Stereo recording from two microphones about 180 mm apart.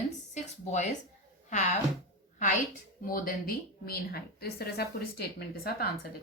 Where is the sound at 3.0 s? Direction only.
50° left (ahead or behind).